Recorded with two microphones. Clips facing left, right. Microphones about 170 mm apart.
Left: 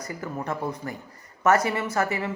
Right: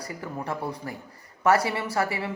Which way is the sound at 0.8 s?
25° right (ahead or behind).